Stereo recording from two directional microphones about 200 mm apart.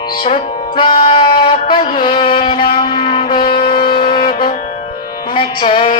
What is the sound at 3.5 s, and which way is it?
Wind instrument, 25° left (ahead or behind).